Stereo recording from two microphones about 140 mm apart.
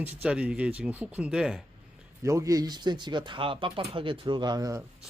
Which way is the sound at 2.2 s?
20° right (ahead or behind).